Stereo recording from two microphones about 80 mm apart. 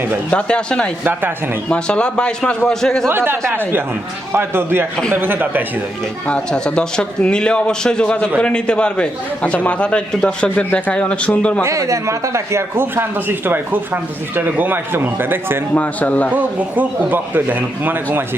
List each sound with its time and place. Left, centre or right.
0.3 s a man's voice: centre
3.1 s speech: right
6.2 s a man's voice: centre
11.6 s speech: right
15.7 s a man's voice: centre
16.3 s speech: centre